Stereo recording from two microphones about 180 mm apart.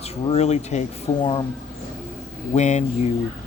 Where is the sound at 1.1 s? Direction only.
20° left (ahead or behind).